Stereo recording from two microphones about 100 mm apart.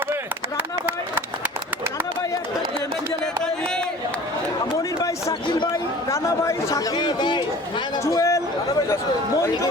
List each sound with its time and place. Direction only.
0.1 s chop: 20° right (ahead or behind)
4.8 s a sound: 35° left (ahead or behind)
5.7 s speech: 35° left (ahead or behind)
6.9 s speech: 45° left (ahead or behind)
8.0 s speech: 30° left (ahead or behind)